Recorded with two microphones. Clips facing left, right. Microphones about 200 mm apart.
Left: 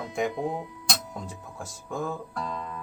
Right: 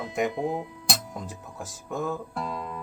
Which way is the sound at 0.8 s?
5° right (ahead or behind).